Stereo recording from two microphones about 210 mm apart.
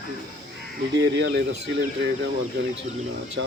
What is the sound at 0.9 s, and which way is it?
Speech, 55° right (ahead or behind).